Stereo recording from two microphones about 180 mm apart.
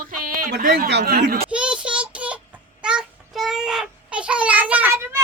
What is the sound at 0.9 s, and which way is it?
Speech, 60° right (ahead or behind).